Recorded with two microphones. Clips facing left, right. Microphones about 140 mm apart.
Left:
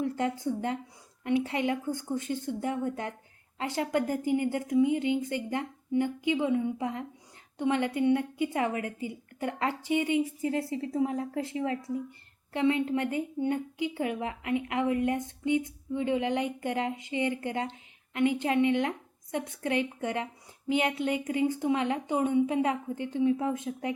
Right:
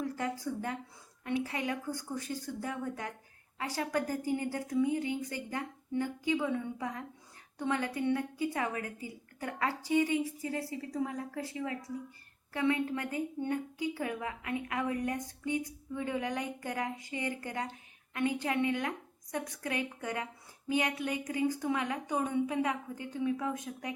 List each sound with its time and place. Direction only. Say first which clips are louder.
0.0 s a woman's voice: left 5 dB; 25° left (ahead or behind)